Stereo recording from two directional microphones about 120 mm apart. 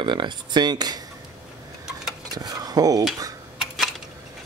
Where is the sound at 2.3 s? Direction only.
30° right (ahead or behind).